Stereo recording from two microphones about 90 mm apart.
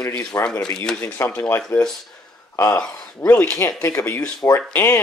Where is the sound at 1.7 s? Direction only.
25° left (ahead or behind).